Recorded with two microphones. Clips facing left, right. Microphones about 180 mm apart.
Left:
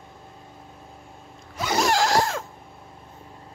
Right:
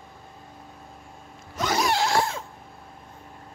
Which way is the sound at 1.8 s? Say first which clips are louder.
Left 4 dB; 90° left.